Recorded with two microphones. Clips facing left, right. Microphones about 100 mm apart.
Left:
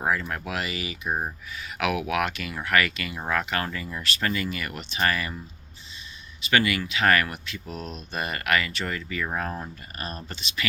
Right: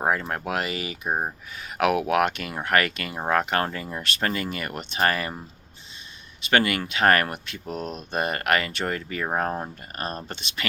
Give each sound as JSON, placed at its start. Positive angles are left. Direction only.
{"t": 0.0, "sound": "speech", "side_deg": -35}
{"t": 6.5, "sound": "speech", "side_deg": -45}